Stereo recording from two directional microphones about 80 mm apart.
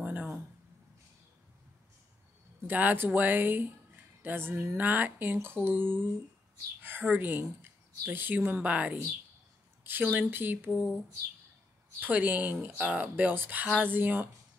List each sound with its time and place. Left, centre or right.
0.0 s a sound: right
2.6 s speech: right
10.7 s speech: centre
12.0 s speech: right